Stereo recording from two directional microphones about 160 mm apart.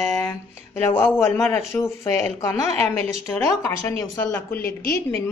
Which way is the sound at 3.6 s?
20° left (ahead or behind).